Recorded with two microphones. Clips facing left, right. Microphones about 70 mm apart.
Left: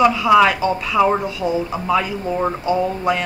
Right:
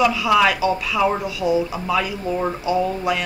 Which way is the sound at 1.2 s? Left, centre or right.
Left.